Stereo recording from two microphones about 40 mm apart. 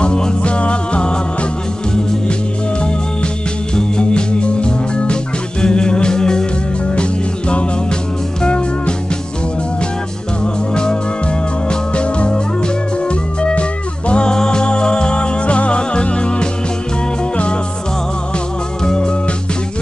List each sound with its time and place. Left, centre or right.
0.0 s music: left
3.7 s music: left
10.4 s music: left
18.9 s music: left